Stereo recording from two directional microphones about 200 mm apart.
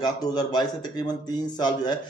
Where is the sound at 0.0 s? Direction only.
20° left (ahead or behind).